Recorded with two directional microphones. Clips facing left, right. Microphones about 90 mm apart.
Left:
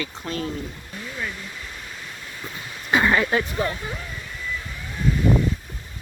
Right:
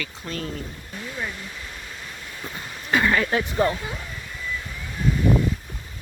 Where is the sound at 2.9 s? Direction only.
25° left (ahead or behind).